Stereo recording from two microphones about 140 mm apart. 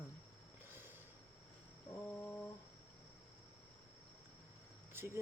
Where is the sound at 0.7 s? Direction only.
15° right (ahead or behind).